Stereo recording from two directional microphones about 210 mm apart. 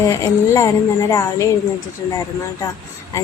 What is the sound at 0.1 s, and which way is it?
Speech, 15° left (ahead or behind).